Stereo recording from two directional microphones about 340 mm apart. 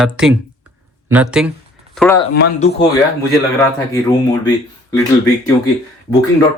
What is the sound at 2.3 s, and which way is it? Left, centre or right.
Speech, left.